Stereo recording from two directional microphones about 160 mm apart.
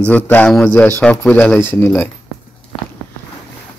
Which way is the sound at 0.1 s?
10° left (ahead or behind).